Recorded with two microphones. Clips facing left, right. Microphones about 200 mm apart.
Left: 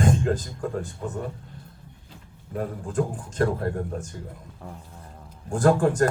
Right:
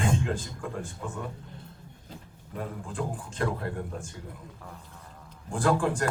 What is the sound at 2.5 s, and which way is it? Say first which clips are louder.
Speech: left 8 dB; 45° left (ahead or behind).